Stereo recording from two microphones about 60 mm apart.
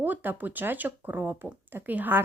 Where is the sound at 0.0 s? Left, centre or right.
Right.